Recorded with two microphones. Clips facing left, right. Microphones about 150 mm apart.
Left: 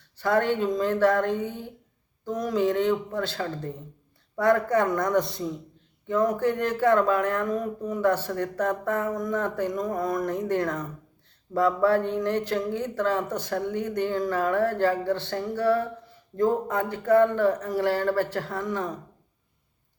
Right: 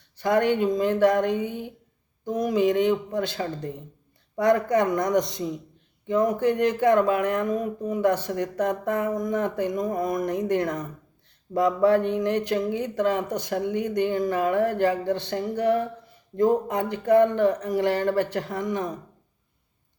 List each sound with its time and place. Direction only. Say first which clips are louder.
0.2 s speech: right 2 dB; 15° right (ahead or behind)